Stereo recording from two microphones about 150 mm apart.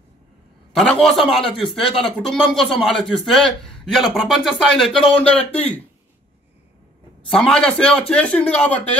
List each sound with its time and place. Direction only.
0.7 s a man's voice: 5° left (ahead or behind)
1.2 s speech: 35° left (ahead or behind)
2.2 s a man's voice: 5° left (ahead or behind)
7.2 s a man's voice: 5° left (ahead or behind)